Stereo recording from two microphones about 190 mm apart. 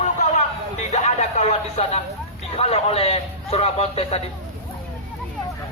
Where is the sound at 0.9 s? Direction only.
35° left (ahead or behind).